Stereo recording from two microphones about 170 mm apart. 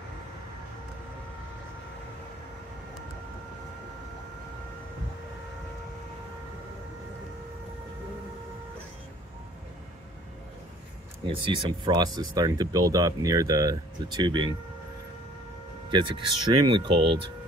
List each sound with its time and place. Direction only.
11.2 s speech: 30° right (ahead or behind)
15.9 s speech: 30° right (ahead or behind)